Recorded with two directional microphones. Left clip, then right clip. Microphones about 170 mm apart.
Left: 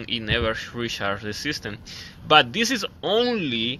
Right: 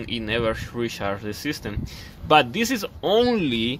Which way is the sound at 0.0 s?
15° right (ahead or behind).